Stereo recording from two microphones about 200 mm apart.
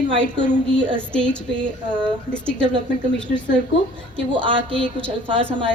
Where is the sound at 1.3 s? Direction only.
5° left (ahead or behind).